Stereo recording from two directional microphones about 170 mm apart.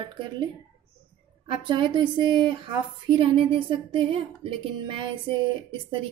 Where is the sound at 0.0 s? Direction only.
30° right (ahead or behind).